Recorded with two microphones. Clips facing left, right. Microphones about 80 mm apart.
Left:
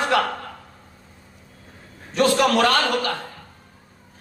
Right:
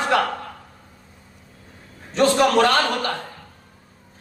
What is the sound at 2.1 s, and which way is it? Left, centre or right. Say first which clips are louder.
A man's voice: right 1 dB; right.